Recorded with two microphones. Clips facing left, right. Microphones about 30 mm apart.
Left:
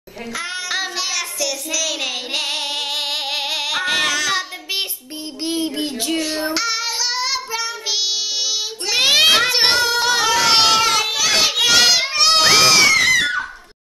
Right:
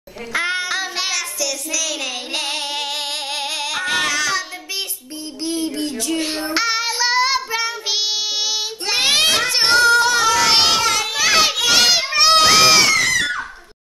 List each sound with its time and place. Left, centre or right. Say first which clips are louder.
0.3 s a child's voice: right 6 dB; right
1.1 s child singing: even; centre
4.3 s child singing: left 1 dB; left
5.4 s a sound: left 1 dB; left
6.1 s child singing: right 1 dB; centre
9.0 s a sound: left 3 dB; centre
9.6 s child singing: right 2 dB; left
9.8 s singing: right 3 dB; centre
10.4 s a sound: left 1 dB; centre
10.8 s children playing: left 2 dB; centre
11.1 s children playing: right 1 dB; centre
12.1 s children shouting: right 2 dB; centre
12.4 s crowd: even; centre
13.0 s screaming: left 3 dB; centre